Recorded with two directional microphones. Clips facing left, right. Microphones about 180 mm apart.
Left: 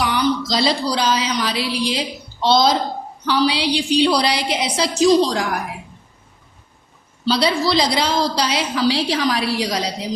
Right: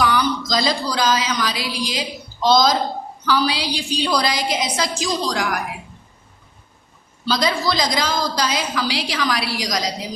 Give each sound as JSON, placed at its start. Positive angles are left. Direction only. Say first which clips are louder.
{"t": 0.0, "sound": "a woman's voice", "louder": "left 1 dB", "side_deg": 25}
{"t": 7.3, "sound": "a woman's voice", "louder": "left 3 dB", "side_deg": 30}